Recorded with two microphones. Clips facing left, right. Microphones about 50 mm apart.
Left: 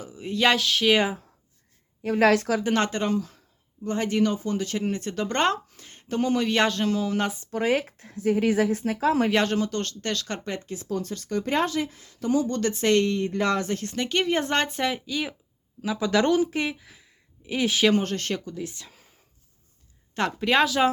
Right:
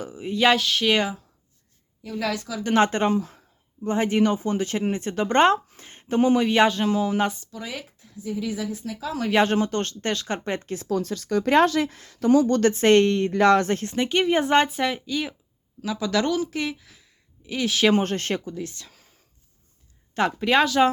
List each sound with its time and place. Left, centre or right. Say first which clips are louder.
0.2 s speech: right 2 dB; centre
2.0 s a woman's voice: left 8 dB; left
2.9 s speech: right 3 dB; right; by 7.3 s centre
7.5 s speech: left 11 dB; left
9.4 s speech: right 4 dB; right
11.4 s speech: right 7 dB; right
12.7 s speech: right 3 dB; right
13.1 s speech: right 6 dB; right
13.7 s speech: right 3 dB; right; by 15.4 s centre
15.8 s speech: left 1 dB; centre
17.9 s speech: right 2 dB; right
18.6 s speech: even; centre
20.1 s speech: right 2 dB; centre